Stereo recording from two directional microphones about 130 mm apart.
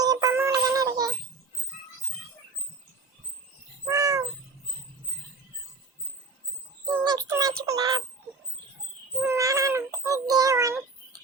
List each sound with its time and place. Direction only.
0.0 s synthetic singing: 30° right (ahead or behind)
0.5 s child singing: 30° right (ahead or behind)
3.8 s crow: 25° right (ahead or behind)
7.0 s music: 30° right (ahead or behind)
9.2 s a sound: 25° right (ahead or behind)